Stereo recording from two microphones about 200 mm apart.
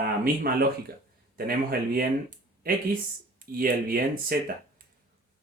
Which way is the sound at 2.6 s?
45° right (ahead or behind).